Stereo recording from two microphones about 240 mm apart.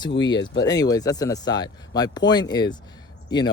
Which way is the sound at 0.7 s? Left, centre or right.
Centre.